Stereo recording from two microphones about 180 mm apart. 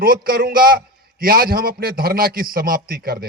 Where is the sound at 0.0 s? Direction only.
55° right (ahead or behind).